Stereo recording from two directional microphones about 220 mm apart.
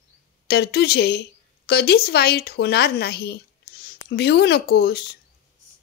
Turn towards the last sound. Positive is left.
turn(degrees=45)  # may be behind; listen again after turning